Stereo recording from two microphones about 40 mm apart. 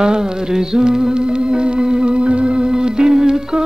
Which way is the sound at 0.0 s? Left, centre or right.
Centre.